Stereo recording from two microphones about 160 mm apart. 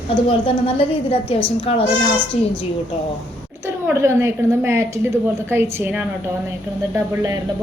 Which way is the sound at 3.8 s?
15° right (ahead or behind).